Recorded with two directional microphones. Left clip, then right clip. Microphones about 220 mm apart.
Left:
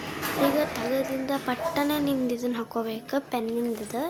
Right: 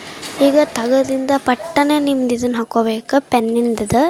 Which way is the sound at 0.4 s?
60° left (ahead or behind).